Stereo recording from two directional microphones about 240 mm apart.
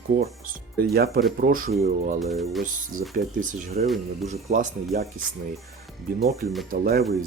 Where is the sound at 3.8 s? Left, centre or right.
Right.